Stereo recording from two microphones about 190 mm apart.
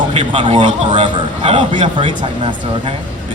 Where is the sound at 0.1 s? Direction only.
30° right (ahead or behind).